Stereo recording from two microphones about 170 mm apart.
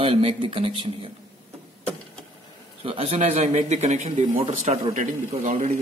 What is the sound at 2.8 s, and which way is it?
Speech, 35° right (ahead or behind).